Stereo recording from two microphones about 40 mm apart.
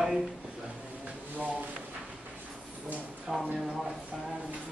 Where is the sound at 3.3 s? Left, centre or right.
Centre.